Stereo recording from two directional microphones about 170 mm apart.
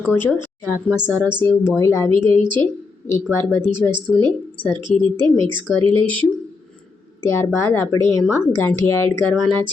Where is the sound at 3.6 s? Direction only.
30° right (ahead or behind).